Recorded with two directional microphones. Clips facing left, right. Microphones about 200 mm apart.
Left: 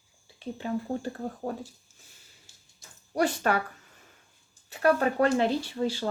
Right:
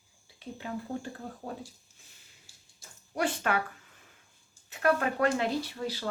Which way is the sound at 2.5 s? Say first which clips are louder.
Left 1 dB; 20° left (ahead or behind).